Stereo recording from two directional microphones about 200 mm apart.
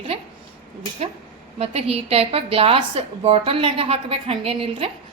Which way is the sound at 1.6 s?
30° right (ahead or behind).